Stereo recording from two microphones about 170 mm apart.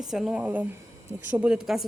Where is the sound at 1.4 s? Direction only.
5° right (ahead or behind).